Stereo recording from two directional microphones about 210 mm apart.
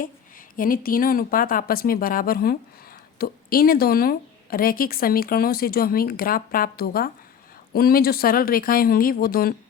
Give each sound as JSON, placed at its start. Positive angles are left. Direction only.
{"t": 0.0, "sound": "speech", "side_deg": 40}